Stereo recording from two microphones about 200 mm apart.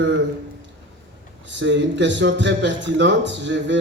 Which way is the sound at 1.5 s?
65° right (ahead or behind).